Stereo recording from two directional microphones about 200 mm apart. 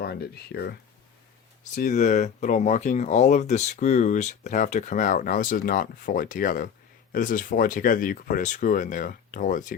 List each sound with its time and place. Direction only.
0.0 s speech: 50° left (ahead or behind)
1.7 s speech: 35° left (ahead or behind)